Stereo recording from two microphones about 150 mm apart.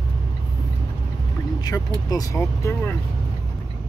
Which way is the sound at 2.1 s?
20° left (ahead or behind).